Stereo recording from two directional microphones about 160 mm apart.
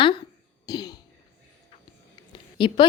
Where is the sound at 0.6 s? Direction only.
25° left (ahead or behind).